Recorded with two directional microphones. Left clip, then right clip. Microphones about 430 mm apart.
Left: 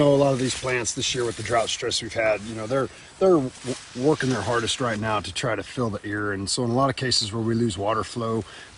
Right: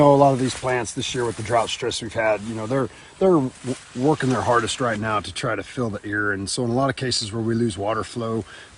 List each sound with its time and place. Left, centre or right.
0.0 s speech: centre
4.0 s speech: centre